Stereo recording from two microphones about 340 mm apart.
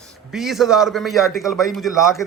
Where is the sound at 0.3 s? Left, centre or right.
Centre.